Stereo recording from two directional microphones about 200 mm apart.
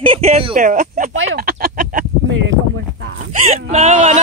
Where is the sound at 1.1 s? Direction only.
50° right (ahead or behind).